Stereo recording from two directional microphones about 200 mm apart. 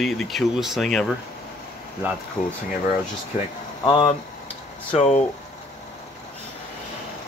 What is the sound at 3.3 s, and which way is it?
Speech, 25° left (ahead or behind).